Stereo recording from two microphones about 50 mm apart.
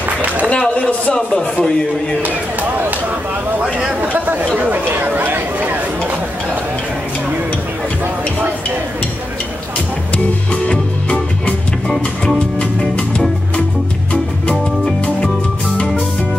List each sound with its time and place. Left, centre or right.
0.6 s a man's voice: centre
4.6 s speech: right
10.1 s music: left